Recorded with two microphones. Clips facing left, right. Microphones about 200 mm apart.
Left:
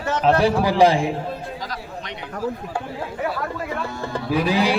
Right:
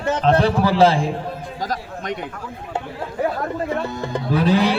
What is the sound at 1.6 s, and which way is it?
Speech, 45° right (ahead or behind).